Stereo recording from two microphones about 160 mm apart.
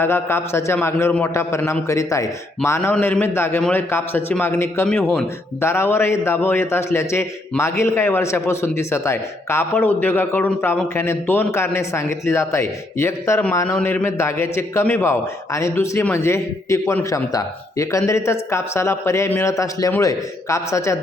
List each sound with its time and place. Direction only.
0.0 s a man's voice: 15° left (ahead or behind)